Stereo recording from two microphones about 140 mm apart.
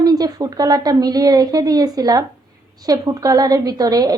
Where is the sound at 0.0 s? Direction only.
25° right (ahead or behind).